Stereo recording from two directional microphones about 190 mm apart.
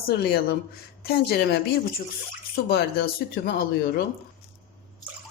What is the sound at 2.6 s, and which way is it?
Speech, 60° left (ahead or behind).